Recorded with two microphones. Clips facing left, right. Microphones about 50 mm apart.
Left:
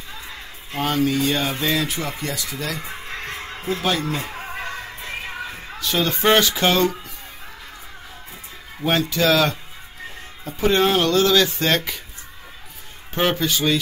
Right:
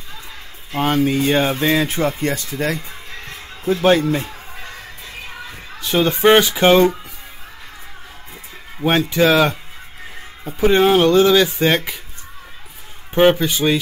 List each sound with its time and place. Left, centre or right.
0.7 s speech: right
2.8 s fowl: left
4.2 s music: left
5.8 s speech: right
8.8 s speech: right
13.1 s speech: centre